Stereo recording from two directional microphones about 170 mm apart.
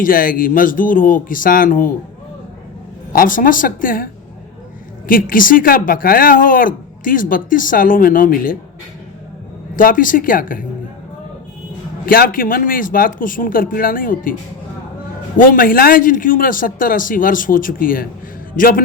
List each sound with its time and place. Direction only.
0.0 s a man's voice: 55° left (ahead or behind)
3.1 s a man's voice: 55° left (ahead or behind)
9.7 s a man's voice: 55° left (ahead or behind)
12.0 s speech: 55° left (ahead or behind)
15.4 s a man's voice: 55° left (ahead or behind)